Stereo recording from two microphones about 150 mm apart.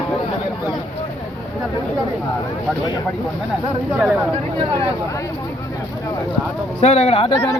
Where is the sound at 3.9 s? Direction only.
10° right (ahead or behind).